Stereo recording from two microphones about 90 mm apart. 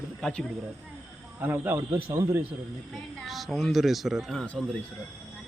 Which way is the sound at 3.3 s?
Centre (ahead or behind).